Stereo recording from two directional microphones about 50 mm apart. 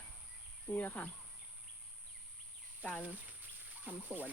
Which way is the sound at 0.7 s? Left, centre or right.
Left.